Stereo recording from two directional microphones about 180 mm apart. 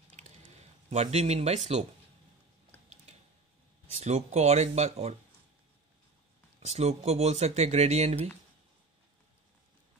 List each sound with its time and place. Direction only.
0.2 s a sound: 40° right (ahead or behind)
0.8 s speech: 35° right (ahead or behind)
4.0 s speech: 40° right (ahead or behind)
6.6 s speech: 35° right (ahead or behind)